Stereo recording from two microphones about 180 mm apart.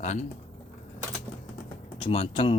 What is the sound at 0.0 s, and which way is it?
Speech, 40° left (ahead or behind).